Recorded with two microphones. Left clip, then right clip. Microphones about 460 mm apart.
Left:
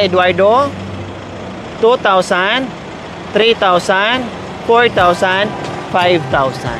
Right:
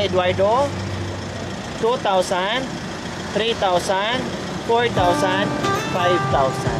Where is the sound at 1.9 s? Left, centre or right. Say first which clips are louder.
Left 8 dB; left.